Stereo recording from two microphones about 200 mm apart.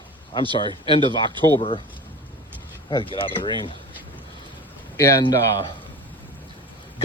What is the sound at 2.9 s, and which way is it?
Speech, 25° left (ahead or behind).